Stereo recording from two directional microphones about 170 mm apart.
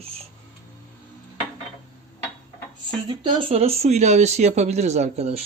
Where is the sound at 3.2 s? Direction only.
30° right (ahead or behind).